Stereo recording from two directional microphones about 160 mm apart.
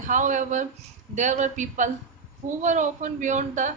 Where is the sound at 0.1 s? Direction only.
50° right (ahead or behind).